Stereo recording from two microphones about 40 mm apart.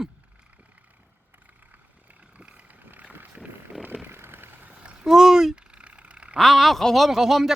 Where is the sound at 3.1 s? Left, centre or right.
Right.